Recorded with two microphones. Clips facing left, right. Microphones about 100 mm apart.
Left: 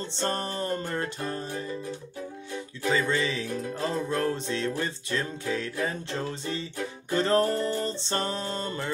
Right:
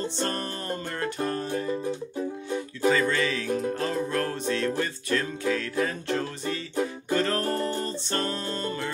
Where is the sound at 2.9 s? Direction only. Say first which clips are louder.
Right 2 dB; 20° left (ahead or behind).